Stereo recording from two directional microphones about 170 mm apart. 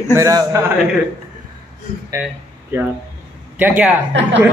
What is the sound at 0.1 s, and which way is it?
Speech, 20° right (ahead or behind).